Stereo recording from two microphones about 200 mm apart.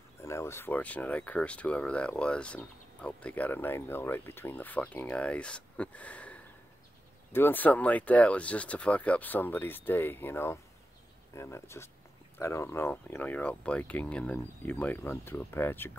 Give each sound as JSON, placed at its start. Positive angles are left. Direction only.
{"t": 0.2, "sound": "speech", "side_deg": 15}